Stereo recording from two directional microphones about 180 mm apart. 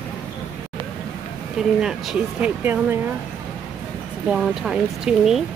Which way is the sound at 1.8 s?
5° right (ahead or behind).